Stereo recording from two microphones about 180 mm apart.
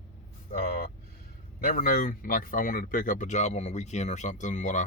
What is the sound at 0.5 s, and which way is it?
Speech, 55° left (ahead or behind).